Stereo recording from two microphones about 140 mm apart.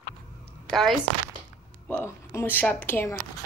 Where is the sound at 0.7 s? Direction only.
Centre (ahead or behind).